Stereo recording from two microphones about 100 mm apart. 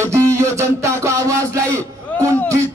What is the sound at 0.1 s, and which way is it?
Music, 30° right (ahead or behind).